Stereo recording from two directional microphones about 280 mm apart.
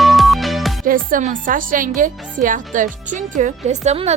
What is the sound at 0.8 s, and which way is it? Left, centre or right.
Speech, right.